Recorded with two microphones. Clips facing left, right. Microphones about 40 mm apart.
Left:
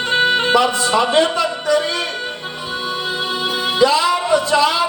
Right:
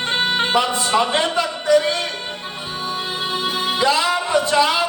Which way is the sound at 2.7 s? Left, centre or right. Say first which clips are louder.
Left 3 dB; right.